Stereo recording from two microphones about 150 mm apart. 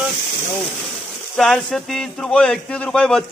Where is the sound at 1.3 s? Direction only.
5° left (ahead or behind).